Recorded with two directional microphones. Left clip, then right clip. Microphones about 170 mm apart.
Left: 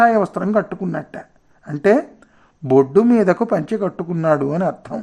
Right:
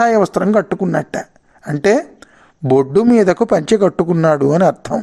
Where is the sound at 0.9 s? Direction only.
30° right (ahead or behind).